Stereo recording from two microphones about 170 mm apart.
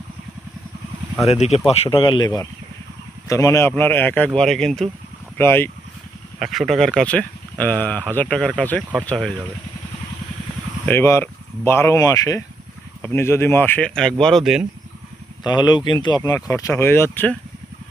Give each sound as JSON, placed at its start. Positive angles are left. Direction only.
{"t": 1.3, "sound": "speech", "side_deg": 40}
{"t": 5.4, "sound": "speech", "side_deg": 15}
{"t": 6.4, "sound": "speech", "side_deg": 0}
{"t": 10.8, "sound": "speech", "side_deg": 15}
{"t": 15.4, "sound": "speech", "side_deg": 25}